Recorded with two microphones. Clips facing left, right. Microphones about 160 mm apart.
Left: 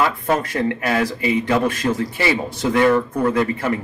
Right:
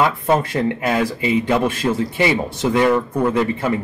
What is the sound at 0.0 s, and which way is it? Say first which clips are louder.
Speech: right 2 dB; 25° right (ahead or behind).